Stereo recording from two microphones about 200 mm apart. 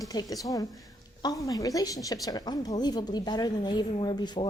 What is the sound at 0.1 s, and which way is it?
A woman's voice, 20° left (ahead or behind).